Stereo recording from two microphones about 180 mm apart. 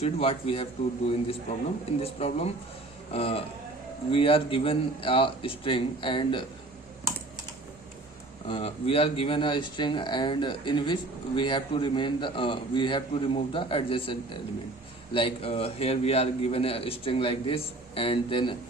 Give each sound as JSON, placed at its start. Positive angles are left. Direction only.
{"t": 0.0, "sound": "a man's voice", "side_deg": 30}
{"t": 8.4, "sound": "a man's voice", "side_deg": 30}